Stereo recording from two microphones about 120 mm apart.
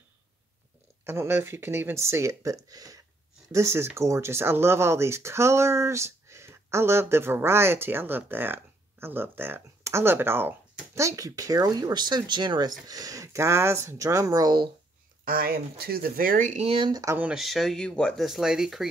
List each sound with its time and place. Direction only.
1.0 s speech: 20° right (ahead or behind); by 14.7 s 35° right (ahead or behind)
16.3 s speech: 80° right; by 16.9 s 55° right (ahead or behind)
16.9 s speech: 25° right (ahead or behind)
17.2 s speech: 5° right (ahead or behind)